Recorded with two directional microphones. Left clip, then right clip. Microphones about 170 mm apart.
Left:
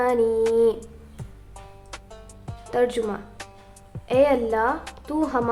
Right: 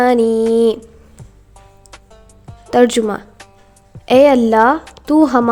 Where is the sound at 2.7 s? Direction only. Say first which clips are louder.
Right 10 dB; 45° right (ahead or behind).